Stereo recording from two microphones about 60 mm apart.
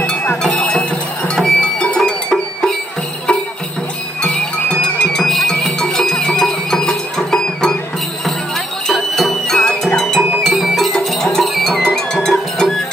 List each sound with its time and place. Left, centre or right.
0.0 s cowbell: centre
1.3 s music: centre
4.2 s music: centre
8.8 s music: centre